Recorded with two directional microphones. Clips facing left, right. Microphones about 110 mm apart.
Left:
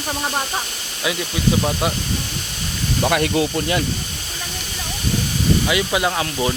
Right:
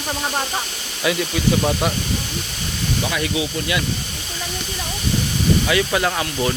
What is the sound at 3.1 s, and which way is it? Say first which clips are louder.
Speech: left 5 dB; 55° left (ahead or behind).